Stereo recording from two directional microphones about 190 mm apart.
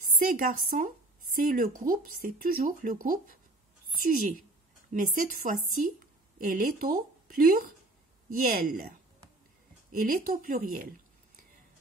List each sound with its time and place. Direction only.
0.2 s a woman's voice: 50° right (ahead or behind)
9.8 s speech: 45° right (ahead or behind)